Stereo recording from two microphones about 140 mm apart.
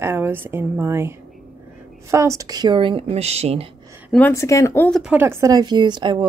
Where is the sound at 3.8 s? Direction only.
20° right (ahead or behind).